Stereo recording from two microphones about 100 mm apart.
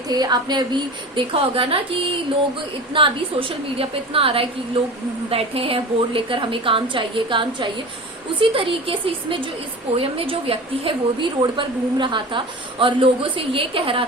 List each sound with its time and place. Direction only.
0.1 s a woman's voice: 45° right (ahead or behind); by 14.0 s 65° right (ahead or behind)